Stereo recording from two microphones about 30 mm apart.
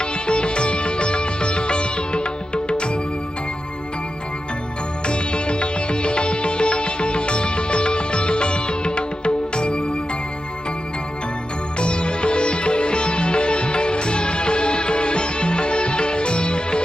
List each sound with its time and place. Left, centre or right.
0.0 s music: left
5.0 s music: left
11.8 s sitar: left